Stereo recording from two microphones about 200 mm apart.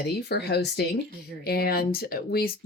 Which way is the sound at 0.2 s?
55° left (ahead or behind).